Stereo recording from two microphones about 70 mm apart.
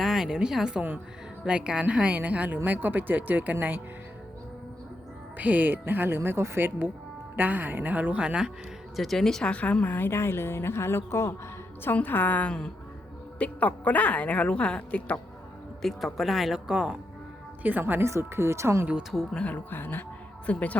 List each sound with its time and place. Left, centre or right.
0.0 s a woman's voice: centre; by 3.8 s right
5.4 s speech: right
9.0 s speech: centre
9.5 s a woman's voice: centre; by 11.3 s left
11.9 s a woman's voice: left
12.5 s speech: centre
13.4 s a woman's voice: left
15.8 s speech: centre
17.6 s speech: right
18.0 s speech: right
19.1 s speech: centre
19.7 s a woman's voice: left